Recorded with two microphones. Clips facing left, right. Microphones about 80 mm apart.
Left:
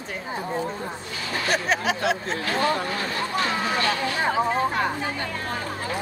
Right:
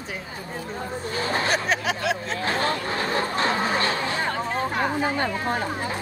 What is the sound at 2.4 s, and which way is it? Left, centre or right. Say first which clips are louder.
Speech: left 1 dB; right.